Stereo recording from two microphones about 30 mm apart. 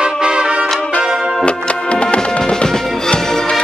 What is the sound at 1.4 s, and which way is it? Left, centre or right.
Music, left.